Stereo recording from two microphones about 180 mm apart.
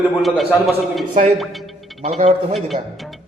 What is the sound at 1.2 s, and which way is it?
A woman's voice, 45° right (ahead or behind).